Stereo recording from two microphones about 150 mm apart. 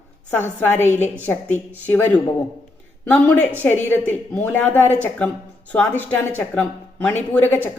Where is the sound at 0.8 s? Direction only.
50° left (ahead or behind).